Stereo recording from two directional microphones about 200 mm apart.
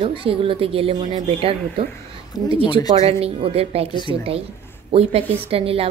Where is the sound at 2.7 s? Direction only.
20° left (ahead or behind).